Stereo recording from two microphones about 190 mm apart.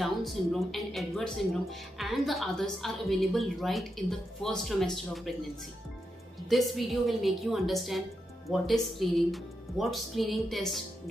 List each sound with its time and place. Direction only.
0.0 s a woman's voice: centre (ahead or behind)
6.5 s a woman's voice: centre (ahead or behind)